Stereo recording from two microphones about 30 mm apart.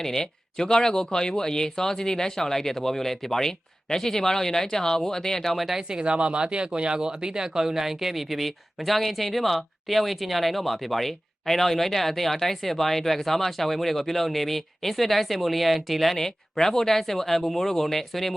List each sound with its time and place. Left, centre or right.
0.0 s speech: centre
6.0 s speech: right; by 16.1 s centre
16.1 s speech: centre